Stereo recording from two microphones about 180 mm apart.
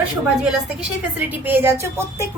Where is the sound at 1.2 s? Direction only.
10° right (ahead or behind).